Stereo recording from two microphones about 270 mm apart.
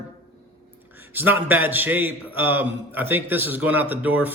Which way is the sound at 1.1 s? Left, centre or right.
Centre.